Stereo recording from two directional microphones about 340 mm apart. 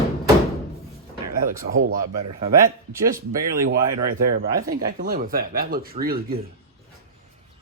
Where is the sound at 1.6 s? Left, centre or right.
Right.